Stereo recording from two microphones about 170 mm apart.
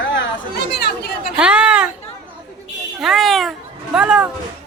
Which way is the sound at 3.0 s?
Centre (ahead or behind).